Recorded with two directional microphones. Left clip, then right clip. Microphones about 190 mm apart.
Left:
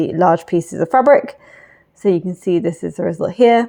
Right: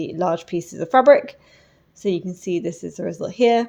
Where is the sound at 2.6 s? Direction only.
30° left (ahead or behind).